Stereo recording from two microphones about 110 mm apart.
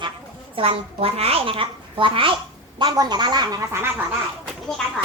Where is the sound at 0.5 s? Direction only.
55° right (ahead or behind).